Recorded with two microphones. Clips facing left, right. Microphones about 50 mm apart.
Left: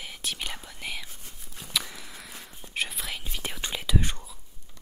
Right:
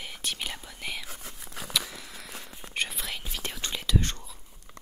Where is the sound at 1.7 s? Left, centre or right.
Centre.